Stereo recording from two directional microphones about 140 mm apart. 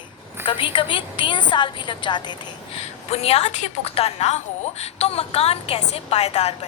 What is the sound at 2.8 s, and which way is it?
A woman's voice, 50° left (ahead or behind).